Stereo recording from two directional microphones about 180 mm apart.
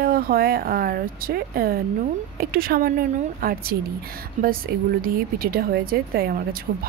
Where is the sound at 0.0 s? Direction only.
55° right (ahead or behind).